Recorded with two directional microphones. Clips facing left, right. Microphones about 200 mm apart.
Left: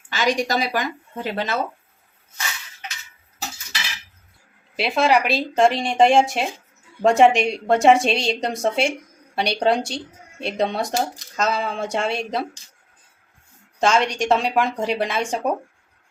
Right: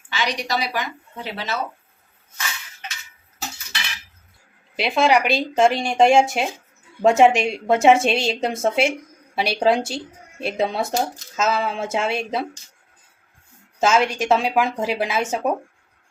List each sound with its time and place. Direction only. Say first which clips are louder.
0.1 s speech: left 4 dB; 45° left (ahead or behind)
4.8 s a woman's voice: right 1 dB; centre (ahead or behind)
13.7 s a woman's voice: right 1 dB; 5° right (ahead or behind)